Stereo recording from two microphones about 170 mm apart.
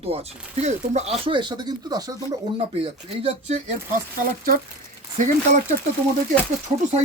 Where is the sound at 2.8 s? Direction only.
35° right (ahead or behind).